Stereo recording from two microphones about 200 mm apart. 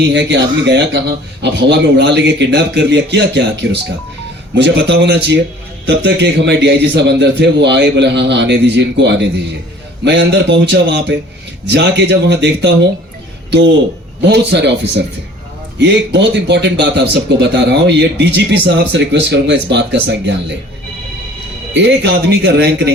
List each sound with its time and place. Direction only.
0.0 s speech: 60° right (ahead or behind)
14.2 s speech: 55° right (ahead or behind)
21.7 s speech: 60° right (ahead or behind)